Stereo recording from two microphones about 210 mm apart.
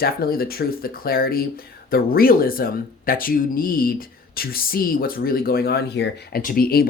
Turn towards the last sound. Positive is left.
turn(degrees=45)  # may be behind; listen again after turning